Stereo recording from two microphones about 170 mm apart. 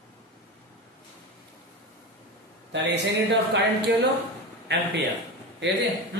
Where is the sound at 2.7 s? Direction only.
90° right.